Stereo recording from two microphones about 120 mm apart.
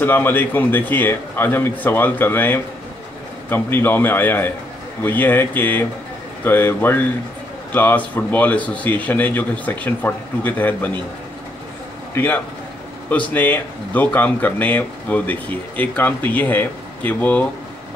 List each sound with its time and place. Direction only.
0.0 s speech: 20° left (ahead or behind)
12.1 s speech: 15° left (ahead or behind)